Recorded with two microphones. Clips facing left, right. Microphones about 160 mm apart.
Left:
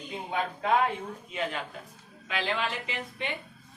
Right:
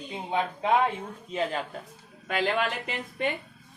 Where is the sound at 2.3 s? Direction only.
50° right (ahead or behind).